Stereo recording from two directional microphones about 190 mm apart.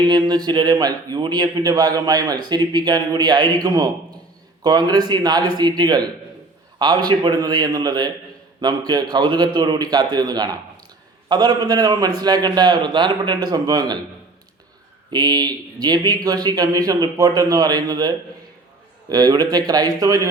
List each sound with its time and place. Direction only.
0.0 s speech: 20° right (ahead or behind)
15.1 s speech: 20° right (ahead or behind)